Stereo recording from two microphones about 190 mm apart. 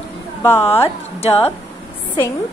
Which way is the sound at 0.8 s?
30° left (ahead or behind).